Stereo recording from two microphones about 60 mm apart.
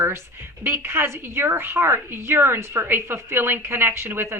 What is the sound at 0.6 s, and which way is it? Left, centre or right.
A woman's voice, right.